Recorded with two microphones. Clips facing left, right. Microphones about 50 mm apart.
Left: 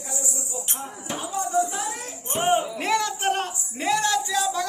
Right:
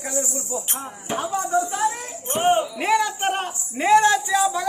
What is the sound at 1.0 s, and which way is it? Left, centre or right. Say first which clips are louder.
Speech: right 4 dB; right.